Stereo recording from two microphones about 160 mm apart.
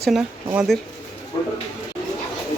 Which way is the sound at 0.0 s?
5° right (ahead or behind).